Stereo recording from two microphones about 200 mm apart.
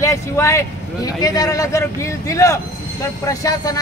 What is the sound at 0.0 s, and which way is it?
Speech, 15° left (ahead or behind).